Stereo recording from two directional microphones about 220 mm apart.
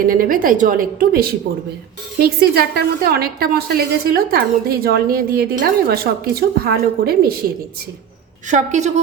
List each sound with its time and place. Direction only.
0.0 s a woman's voice: 40° right (ahead or behind)
8.4 s a woman's voice: 35° right (ahead or behind)